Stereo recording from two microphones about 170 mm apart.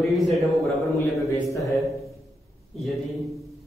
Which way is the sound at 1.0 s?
20° left (ahead or behind).